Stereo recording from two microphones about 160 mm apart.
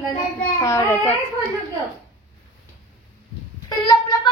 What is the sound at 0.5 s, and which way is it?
Speech, 20° left (ahead or behind).